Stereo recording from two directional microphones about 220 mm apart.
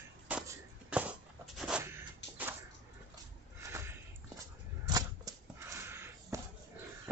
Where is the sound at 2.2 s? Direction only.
55° left (ahead or behind).